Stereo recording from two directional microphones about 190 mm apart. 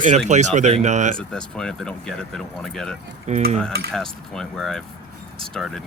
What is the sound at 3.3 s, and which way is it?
Speech, 35° right (ahead or behind).